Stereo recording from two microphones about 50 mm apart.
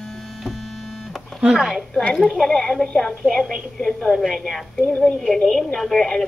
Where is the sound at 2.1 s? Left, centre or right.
Centre.